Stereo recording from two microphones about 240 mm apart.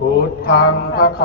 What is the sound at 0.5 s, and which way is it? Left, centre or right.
Music, left.